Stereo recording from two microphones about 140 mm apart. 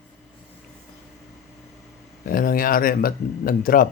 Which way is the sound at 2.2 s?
90° left.